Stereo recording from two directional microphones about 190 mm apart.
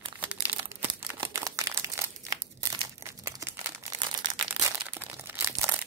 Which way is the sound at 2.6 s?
15° right (ahead or behind).